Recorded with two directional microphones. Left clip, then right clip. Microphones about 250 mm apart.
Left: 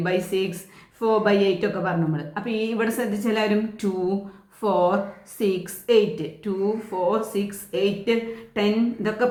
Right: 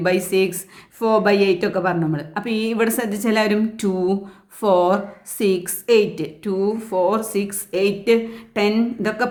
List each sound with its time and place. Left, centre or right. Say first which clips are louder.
0.0 s a woman's voice: right 5 dB; right